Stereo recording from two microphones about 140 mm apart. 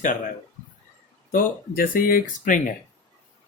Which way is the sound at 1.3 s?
85° left.